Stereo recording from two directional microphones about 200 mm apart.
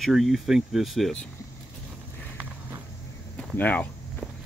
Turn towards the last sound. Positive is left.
turn(degrees=5)  # may be behind; listen again after turning